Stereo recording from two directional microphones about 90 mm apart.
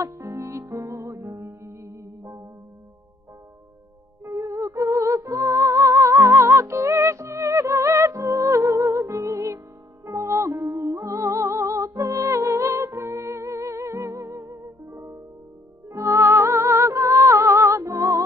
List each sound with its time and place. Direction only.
0.0 s music: 35° right (ahead or behind)
4.2 s music: 30° right (ahead or behind)